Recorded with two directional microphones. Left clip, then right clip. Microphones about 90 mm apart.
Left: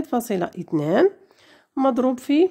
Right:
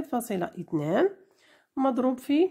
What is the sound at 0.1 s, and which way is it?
A woman's voice, 35° left (ahead or behind).